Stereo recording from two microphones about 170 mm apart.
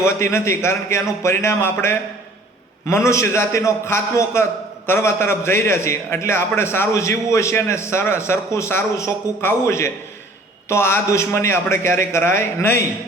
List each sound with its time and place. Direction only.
0.0 s a man's voice: 15° left (ahead or behind)